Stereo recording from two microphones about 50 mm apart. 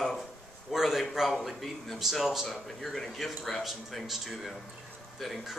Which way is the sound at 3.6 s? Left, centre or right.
Centre.